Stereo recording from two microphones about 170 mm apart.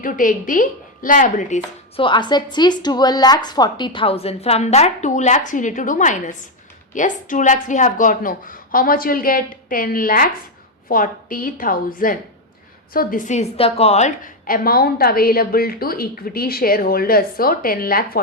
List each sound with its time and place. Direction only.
0.0 s a woman's voice: 55° left (ahead or behind)
2.0 s a woman's voice: 30° left (ahead or behind); by 18.2 s 60° left (ahead or behind)